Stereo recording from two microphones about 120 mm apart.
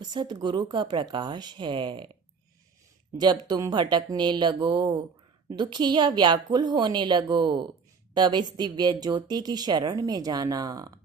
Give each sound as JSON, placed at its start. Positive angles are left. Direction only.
{"t": 0.0, "sound": "speech", "side_deg": -35}
{"t": 3.2, "sound": "speech", "side_deg": -35}